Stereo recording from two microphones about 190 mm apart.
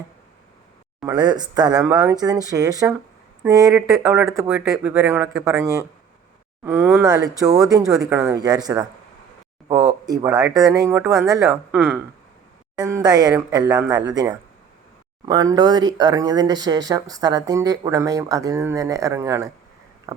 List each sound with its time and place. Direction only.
1.0 s speech: 20° right (ahead or behind)
12.7 s speech: 20° right (ahead or behind)
20.1 s a sound: 15° right (ahead or behind)